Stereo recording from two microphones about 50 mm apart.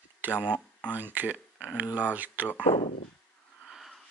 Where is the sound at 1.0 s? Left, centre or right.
Right.